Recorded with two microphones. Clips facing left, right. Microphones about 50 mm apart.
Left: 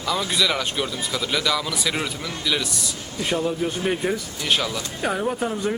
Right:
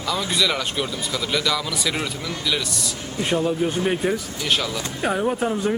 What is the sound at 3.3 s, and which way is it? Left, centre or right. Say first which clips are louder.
A man's voice: right 2 dB; centre.